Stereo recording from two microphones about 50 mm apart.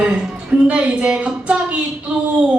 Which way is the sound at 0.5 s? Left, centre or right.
Right.